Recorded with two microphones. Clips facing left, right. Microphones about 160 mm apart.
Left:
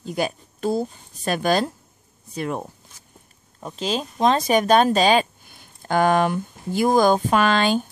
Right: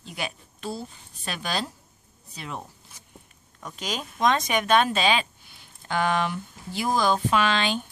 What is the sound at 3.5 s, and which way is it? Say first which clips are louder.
Speech: left 7 dB; 30° left (ahead or behind).